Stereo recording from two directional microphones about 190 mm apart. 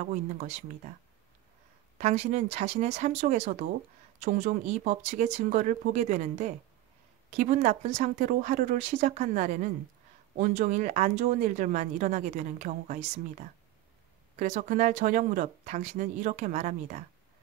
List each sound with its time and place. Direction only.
0.0 s speech: 40° right (ahead or behind)
2.0 s speech: 35° right (ahead or behind)
14.4 s speech: 40° right (ahead or behind)